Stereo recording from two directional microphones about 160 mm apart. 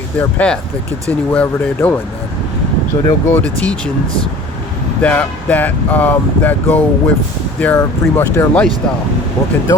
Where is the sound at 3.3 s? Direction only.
5° left (ahead or behind).